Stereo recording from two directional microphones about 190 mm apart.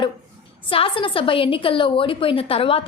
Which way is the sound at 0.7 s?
30° left (ahead or behind).